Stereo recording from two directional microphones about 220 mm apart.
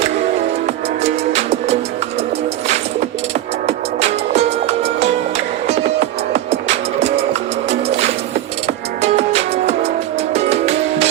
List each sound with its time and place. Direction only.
1.0 s music: 30° right (ahead or behind)
3.7 s music: 30° right (ahead or behind)